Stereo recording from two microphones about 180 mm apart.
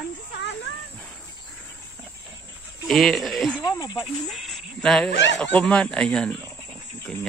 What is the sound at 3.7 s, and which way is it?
Snake, 20° left (ahead or behind).